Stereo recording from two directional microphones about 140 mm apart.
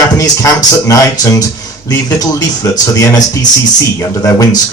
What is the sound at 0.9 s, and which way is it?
A man's voice, 25° left (ahead or behind).